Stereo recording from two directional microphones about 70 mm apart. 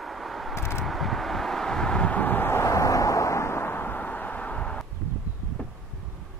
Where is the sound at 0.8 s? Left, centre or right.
Centre.